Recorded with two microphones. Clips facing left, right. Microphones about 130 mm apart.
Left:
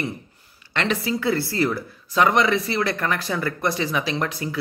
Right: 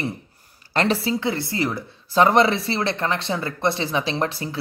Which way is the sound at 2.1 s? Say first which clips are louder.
Right 2 dB; 30° right (ahead or behind).